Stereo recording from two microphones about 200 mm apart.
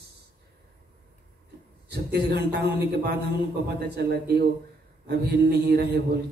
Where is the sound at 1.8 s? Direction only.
55° right (ahead or behind).